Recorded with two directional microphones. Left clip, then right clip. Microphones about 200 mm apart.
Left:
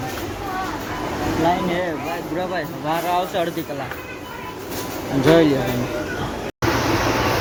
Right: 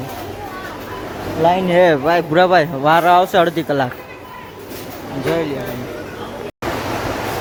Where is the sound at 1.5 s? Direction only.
50° right (ahead or behind); by 3.6 s 30° right (ahead or behind).